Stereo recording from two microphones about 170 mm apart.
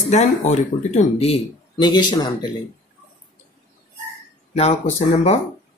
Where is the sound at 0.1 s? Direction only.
45° left (ahead or behind); by 2.3 s 25° left (ahead or behind).